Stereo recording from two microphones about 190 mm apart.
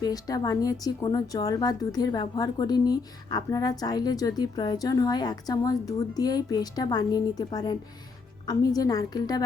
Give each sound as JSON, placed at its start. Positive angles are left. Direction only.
{"t": 0.0, "sound": "a woman's voice", "side_deg": 20}